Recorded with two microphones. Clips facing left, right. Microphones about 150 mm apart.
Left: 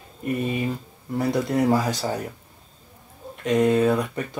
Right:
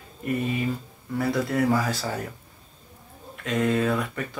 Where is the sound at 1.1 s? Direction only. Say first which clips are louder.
Left 2 dB; 20° left (ahead or behind).